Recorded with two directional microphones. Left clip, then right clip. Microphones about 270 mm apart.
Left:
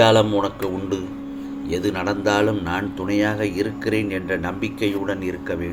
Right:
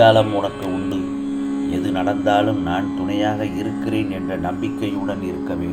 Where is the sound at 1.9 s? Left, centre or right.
Left.